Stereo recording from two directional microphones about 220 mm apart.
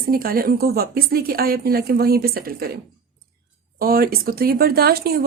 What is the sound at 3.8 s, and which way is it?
A woman's voice, 40° right (ahead or behind).